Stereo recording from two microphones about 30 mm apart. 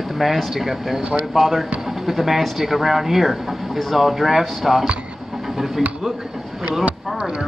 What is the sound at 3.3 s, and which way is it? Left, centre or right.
Speech, centre.